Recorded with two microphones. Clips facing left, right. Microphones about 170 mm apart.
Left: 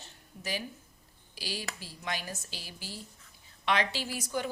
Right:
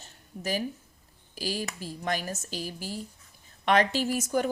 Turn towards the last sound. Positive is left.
turn(degrees=-45)  # may be behind; listen again after turning